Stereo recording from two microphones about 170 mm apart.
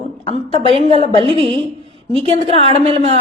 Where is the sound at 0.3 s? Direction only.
30° left (ahead or behind).